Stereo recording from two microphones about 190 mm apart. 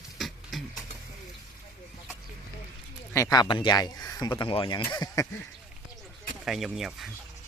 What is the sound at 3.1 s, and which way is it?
Speech, 15° left (ahead or behind).